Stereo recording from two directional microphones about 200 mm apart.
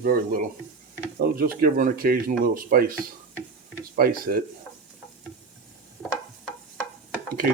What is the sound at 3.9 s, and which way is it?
Speech, 45° right (ahead or behind).